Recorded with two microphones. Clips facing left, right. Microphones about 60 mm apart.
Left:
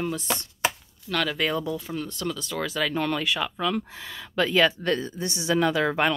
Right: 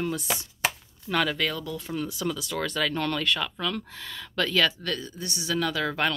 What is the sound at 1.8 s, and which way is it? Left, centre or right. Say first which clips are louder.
Speech: right 1 dB; centre.